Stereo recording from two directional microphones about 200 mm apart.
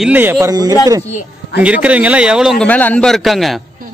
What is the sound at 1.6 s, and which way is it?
A man's voice, 5° right (ahead or behind).